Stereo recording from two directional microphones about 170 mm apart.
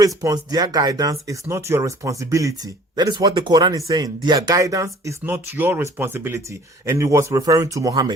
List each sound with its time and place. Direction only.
0.2 s speech: 20° right (ahead or behind)